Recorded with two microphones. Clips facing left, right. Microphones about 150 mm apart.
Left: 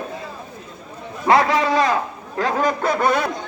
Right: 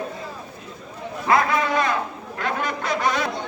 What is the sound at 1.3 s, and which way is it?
A man's voice, 30° left (ahead or behind).